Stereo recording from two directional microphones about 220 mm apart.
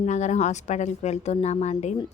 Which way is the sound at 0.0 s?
30° left (ahead or behind).